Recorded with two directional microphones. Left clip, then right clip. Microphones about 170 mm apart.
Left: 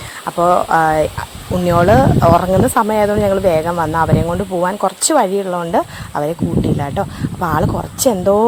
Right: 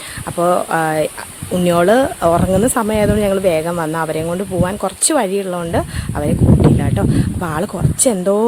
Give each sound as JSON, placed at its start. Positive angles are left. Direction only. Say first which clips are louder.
{"t": 0.3, "sound": "speech", "louder": "left 3 dB", "side_deg": -15}